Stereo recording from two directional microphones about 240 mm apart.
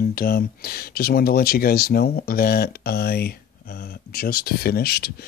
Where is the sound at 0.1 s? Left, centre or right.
Left.